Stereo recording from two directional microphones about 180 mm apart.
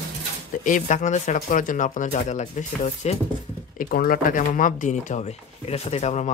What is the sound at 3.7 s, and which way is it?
Speech, 50° left (ahead or behind).